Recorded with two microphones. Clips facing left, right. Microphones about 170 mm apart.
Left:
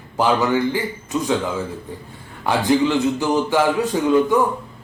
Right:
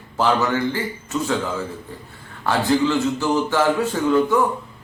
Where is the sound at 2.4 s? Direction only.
15° left (ahead or behind).